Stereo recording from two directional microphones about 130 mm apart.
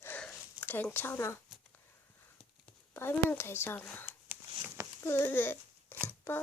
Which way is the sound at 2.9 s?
20° left (ahead or behind).